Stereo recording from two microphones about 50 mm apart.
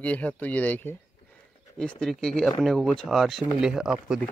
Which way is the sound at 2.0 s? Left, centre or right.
Centre.